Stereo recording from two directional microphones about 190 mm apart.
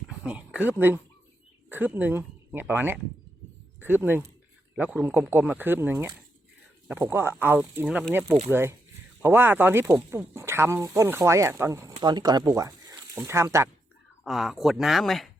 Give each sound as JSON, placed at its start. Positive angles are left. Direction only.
{"t": 0.1, "sound": "speech", "side_deg": -5}
{"t": 12.5, "sound": "a sound", "side_deg": -20}
{"t": 13.1, "sound": "speech", "side_deg": -15}
{"t": 14.3, "sound": "speech", "side_deg": 0}